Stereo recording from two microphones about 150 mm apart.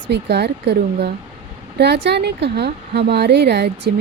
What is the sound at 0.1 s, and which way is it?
Speech, 90° right.